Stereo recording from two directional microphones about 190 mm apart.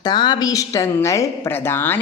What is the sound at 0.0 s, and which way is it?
A woman's voice, 25° left (ahead or behind).